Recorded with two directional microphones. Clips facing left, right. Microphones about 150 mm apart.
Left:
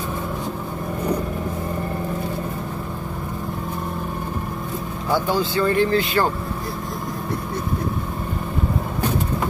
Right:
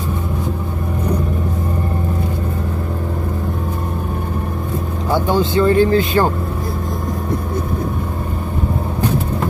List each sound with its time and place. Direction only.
5.1 s speech: 25° right (ahead or behind)